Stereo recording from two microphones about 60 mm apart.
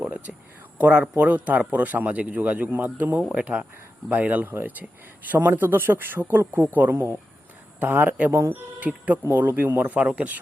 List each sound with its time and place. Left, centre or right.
0.3 s a sound: centre
0.8 s a man's voice: right
8.3 s speech: right
8.5 s speech: right
9.9 s a man's voice: right